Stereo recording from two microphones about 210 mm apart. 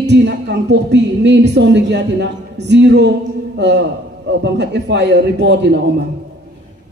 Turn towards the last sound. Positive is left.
turn(degrees=-55)  # may be behind; listen again after turning